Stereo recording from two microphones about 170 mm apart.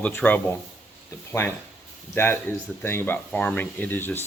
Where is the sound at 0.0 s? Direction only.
10° left (ahead or behind).